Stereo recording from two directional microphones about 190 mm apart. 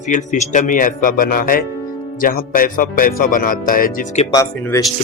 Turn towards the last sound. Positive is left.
turn(degrees=15)  # may be behind; listen again after turning